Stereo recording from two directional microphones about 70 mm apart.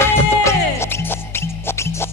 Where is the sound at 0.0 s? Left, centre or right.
Left.